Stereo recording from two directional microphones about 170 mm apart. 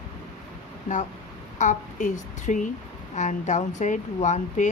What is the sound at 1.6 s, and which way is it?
Speech, 45° left (ahead or behind).